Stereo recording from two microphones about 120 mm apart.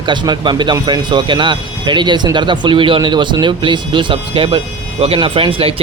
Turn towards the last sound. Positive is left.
turn(degrees=-50)  # may be behind; listen again after turning